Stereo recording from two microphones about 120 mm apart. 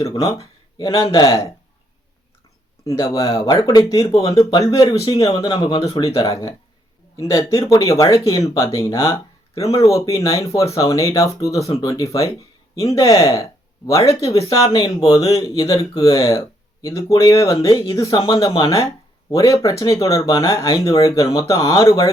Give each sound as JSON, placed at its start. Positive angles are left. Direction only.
{"t": 0.1, "sound": "speech", "side_deg": 30}
{"t": 2.8, "sound": "speech", "side_deg": 25}
{"t": 3.9, "sound": "speech", "side_deg": 50}
{"t": 4.2, "sound": "speech", "side_deg": 30}